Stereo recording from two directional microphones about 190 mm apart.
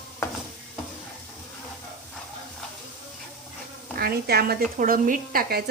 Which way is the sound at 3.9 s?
55° right (ahead or behind).